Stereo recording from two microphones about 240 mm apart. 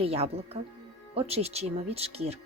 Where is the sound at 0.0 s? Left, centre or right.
Right.